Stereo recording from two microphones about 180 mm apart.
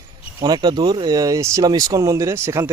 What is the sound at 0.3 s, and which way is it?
Speech, 20° right (ahead or behind).